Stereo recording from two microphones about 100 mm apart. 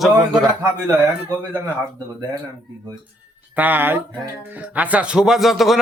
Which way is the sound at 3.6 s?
15° right (ahead or behind).